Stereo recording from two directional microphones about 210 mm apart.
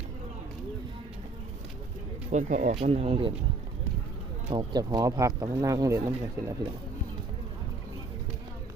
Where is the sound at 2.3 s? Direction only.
35° right (ahead or behind).